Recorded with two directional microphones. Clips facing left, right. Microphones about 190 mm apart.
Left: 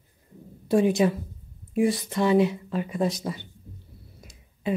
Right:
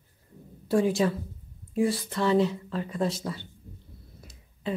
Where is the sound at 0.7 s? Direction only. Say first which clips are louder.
Left 3 dB; 20° left (ahead or behind).